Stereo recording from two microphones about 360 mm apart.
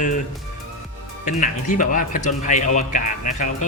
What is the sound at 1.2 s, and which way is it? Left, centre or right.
Speech, left.